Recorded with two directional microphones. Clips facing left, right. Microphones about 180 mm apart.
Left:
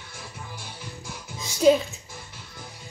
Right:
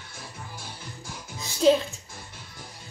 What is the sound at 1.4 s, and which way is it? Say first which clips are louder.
Music: left 1 dB; 20° left (ahead or behind).